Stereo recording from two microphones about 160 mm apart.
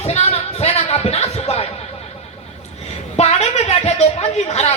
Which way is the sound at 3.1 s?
45° left (ahead or behind).